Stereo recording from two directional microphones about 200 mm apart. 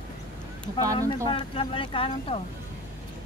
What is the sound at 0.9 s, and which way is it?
Speech, 25° left (ahead or behind).